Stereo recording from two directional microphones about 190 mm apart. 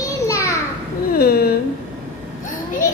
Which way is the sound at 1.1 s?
55° left (ahead or behind).